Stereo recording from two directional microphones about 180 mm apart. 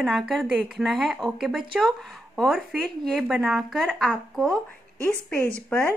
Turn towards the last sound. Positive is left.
turn(degrees=5)  # may be behind; listen again after turning